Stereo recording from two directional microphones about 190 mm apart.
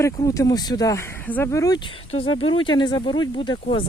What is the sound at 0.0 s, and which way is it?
Speech, 15° left (ahead or behind).